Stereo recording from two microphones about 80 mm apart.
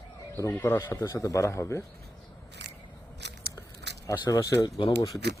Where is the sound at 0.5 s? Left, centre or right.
Left.